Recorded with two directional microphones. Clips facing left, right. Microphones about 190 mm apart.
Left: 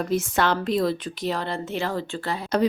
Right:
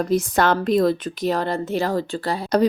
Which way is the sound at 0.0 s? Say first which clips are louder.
Right 4 dB; 40° right (ahead or behind).